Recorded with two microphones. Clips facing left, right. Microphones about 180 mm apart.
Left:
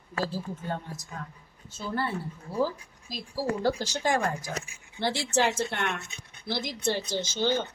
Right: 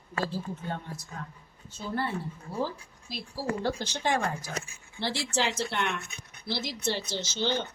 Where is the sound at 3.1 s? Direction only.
45° left (ahead or behind).